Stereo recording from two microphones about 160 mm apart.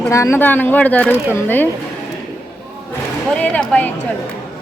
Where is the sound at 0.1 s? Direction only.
15° left (ahead or behind).